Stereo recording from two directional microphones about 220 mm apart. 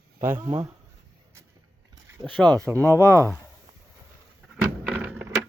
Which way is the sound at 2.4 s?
5° right (ahead or behind).